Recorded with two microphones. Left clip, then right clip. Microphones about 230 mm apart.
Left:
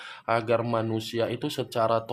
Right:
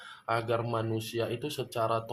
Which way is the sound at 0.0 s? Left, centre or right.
Left.